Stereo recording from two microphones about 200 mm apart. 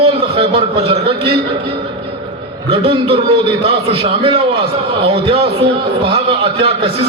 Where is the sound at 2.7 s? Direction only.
30° right (ahead or behind).